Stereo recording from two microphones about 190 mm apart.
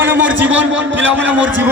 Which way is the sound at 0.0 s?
10° right (ahead or behind).